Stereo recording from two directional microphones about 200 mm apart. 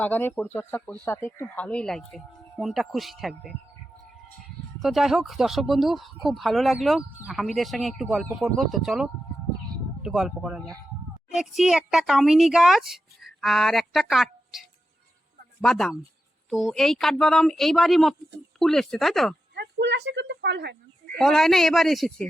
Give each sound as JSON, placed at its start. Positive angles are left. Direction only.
{"t": 0.0, "sound": "a child's voice", "side_deg": 10}
{"t": 4.8, "sound": "a child's voice", "side_deg": 0}
{"t": 15.6, "sound": "a child's voice", "side_deg": 0}
{"t": 19.5, "sound": "a woman's voice", "side_deg": -60}
{"t": 21.2, "sound": "a child's voice", "side_deg": 0}